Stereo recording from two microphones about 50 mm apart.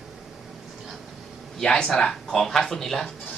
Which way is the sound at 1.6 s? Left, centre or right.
Centre.